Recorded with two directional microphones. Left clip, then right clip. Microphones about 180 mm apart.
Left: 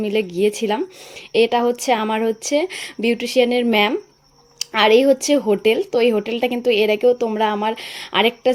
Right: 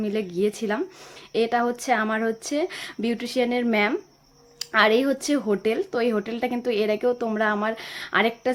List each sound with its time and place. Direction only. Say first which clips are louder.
0.0 s speech: left 6 dB; 10° left (ahead or behind)